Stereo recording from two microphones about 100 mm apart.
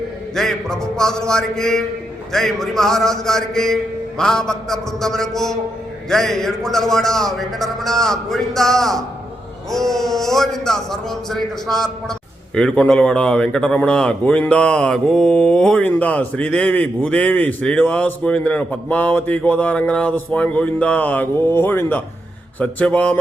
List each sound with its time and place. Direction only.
0.3 s a man's voice: 5° left (ahead or behind)